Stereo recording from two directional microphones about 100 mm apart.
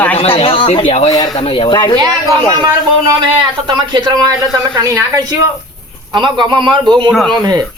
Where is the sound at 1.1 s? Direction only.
45° left (ahead or behind).